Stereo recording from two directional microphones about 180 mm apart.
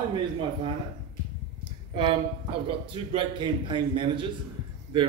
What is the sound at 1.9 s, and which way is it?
A man's voice, 30° right (ahead or behind).